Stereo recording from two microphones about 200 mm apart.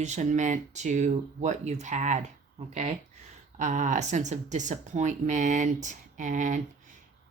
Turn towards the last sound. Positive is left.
turn(degrees=-40)  # may be behind; listen again after turning